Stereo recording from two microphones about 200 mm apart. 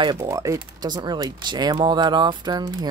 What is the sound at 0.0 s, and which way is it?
Speech, 20° right (ahead or behind).